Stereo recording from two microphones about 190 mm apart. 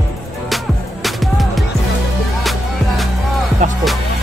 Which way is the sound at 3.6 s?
40° right (ahead or behind).